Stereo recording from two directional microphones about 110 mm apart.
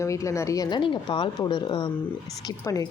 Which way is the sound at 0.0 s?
30° left (ahead or behind).